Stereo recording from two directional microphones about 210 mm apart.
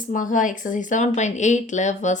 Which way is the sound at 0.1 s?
40° left (ahead or behind).